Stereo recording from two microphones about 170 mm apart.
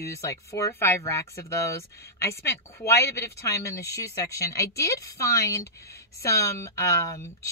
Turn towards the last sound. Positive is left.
turn(degrees=15)  # may be behind; listen again after turning